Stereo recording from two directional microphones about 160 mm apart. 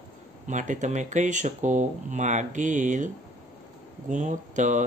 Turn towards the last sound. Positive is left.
turn(degrees=-50)  # may be behind; listen again after turning